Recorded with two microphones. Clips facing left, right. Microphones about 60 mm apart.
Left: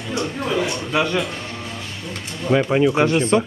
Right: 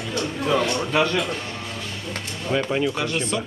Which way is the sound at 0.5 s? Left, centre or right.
Centre.